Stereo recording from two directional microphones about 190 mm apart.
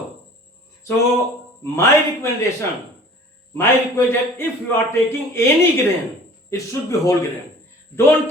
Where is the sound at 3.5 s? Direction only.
10° left (ahead or behind).